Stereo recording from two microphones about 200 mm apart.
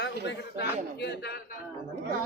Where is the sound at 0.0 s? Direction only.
55° left (ahead or behind).